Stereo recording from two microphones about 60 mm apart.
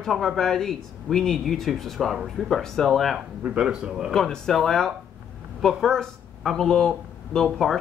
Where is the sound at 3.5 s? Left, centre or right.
Centre.